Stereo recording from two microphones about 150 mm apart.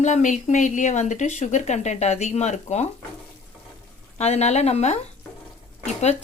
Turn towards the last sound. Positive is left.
turn(degrees=45)  # may be behind; listen again after turning